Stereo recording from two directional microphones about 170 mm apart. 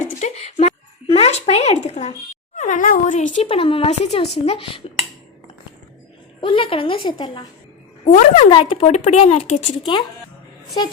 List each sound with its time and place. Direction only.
0.0 s a sound: 40° left (ahead or behind)
1.8 s speech: 40° left (ahead or behind)
2.6 s speech: 50° left (ahead or behind); by 4.8 s 30° left (ahead or behind)
6.4 s speech: 30° left (ahead or behind)
8.0 s speech: 40° left (ahead or behind)
9.8 s speech: 30° left (ahead or behind)